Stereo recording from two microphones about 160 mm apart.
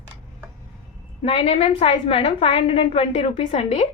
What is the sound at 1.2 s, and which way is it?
A woman's voice, 40° left (ahead or behind).